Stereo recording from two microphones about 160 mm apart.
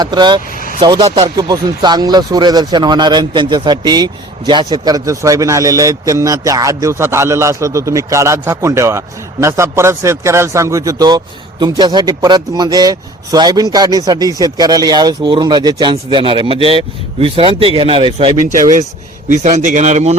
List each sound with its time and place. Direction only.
0.0 s speech: 25° right (ahead or behind)
0.5 s vehicle: 60° left (ahead or behind)
0.8 s speech: 25° right (ahead or behind)
18.4 s a man's voice: 50° right (ahead or behind)